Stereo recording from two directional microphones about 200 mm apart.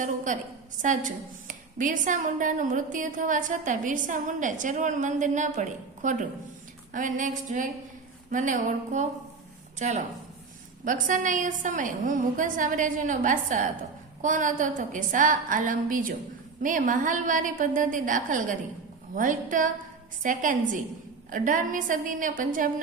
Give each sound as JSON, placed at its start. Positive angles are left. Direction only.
{"t": 0.3, "sound": "a woman's voice", "side_deg": -40}